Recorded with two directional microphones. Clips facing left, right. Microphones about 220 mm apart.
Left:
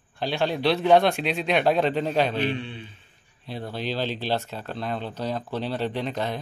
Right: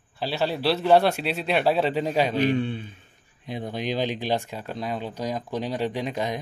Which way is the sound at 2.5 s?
40° right (ahead or behind).